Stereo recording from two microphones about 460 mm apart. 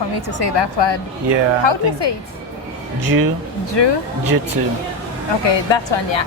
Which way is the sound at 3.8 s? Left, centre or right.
Left.